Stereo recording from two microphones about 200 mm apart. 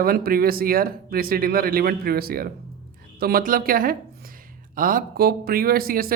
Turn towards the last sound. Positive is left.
turn(degrees=-45)  # may be behind; listen again after turning